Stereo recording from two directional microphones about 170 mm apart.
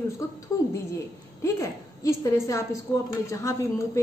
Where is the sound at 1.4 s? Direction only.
20° left (ahead or behind).